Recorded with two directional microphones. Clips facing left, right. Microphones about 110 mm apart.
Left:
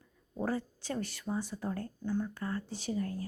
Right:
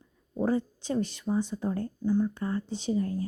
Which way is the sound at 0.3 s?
20° right (ahead or behind).